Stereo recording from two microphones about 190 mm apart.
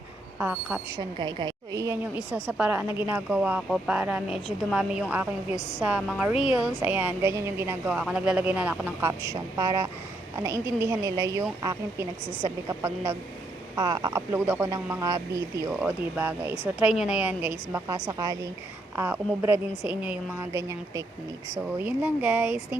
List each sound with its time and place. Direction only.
0.3 s speech: 5° right (ahead or behind)
0.9 s speech: 20° right (ahead or behind)
2.1 s speech: 5° right (ahead or behind)
5.5 s a woman's voice: 20° left (ahead or behind)
5.8 s a woman's voice: 5° right (ahead or behind)
12.2 s a woman's voice: 25° left (ahead or behind)
12.6 s speech: 15° right (ahead or behind)